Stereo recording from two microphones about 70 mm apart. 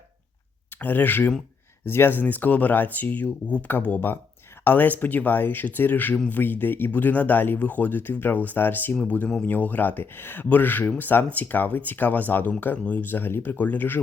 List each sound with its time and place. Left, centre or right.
0.8 s speech: left